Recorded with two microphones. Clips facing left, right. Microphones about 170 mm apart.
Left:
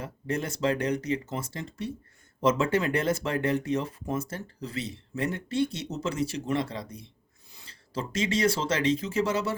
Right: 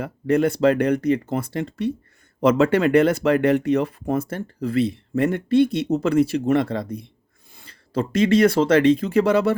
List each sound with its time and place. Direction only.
0.0 s speech: 60° right (ahead or behind)